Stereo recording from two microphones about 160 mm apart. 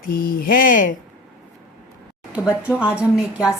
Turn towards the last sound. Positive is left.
turn(degrees=-5)  # may be behind; listen again after turning